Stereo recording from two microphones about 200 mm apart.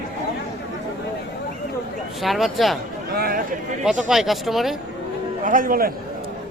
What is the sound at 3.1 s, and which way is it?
Speech, 50° right (ahead or behind).